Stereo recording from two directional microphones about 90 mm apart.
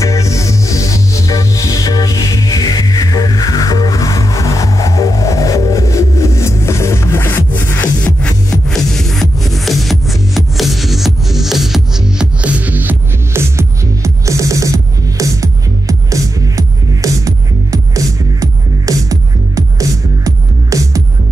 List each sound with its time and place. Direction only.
0.0 s music: 35° left (ahead or behind); by 21.0 s 40° right (ahead or behind)